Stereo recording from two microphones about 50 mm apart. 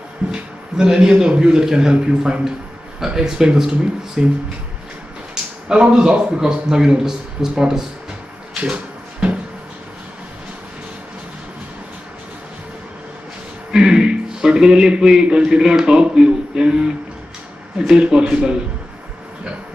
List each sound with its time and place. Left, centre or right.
0.3 s speech: centre
5.3 s a man's voice: centre
8.7 s drawer open or close: right
13.7 s speech: centre